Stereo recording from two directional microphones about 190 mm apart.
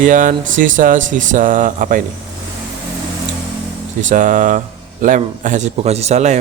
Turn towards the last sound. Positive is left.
turn(degrees=-35)  # may be behind; listen again after turning